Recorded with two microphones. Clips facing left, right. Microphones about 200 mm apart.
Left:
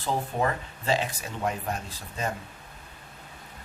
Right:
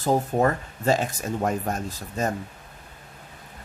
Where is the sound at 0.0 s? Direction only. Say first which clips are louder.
Right 6 dB; 45° right (ahead or behind).